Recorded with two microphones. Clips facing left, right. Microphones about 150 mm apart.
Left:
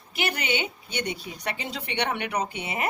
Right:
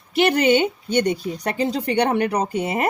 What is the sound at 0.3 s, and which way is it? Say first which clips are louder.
Speech: right 12 dB; 45° right (ahead or behind).